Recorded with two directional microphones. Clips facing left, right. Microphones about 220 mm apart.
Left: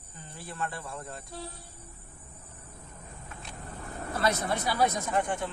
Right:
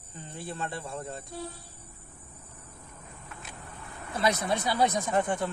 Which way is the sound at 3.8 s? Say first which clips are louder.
Left 8 dB; 40° left (ahead or behind).